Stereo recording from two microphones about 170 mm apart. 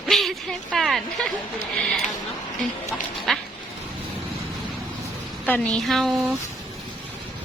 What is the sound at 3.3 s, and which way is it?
Speech, centre (ahead or behind).